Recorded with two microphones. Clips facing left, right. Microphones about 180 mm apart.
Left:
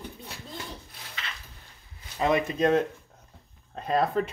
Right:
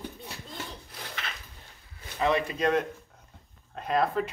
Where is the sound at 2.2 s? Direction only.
25° left (ahead or behind).